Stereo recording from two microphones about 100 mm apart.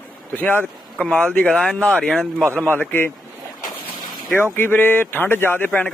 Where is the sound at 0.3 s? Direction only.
15° left (ahead or behind).